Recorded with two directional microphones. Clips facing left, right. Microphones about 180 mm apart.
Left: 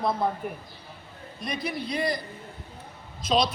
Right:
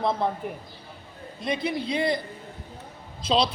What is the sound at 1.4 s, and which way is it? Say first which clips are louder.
Speech: right 4 dB; 25° right (ahead or behind).